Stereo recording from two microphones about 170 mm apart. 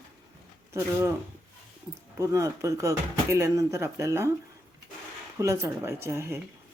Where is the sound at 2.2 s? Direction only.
20° right (ahead or behind).